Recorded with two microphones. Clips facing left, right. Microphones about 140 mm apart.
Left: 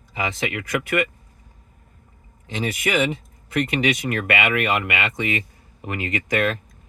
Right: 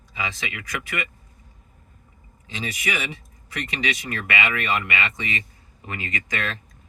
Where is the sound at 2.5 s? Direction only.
55° left (ahead or behind).